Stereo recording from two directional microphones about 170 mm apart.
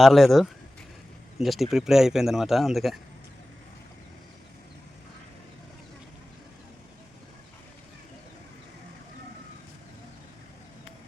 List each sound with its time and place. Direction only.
0.0 s speech: centre (ahead or behind)